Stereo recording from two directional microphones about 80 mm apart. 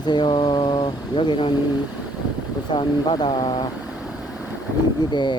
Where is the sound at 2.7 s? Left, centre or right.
Left.